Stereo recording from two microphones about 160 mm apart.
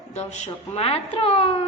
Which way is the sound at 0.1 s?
45° left (ahead or behind).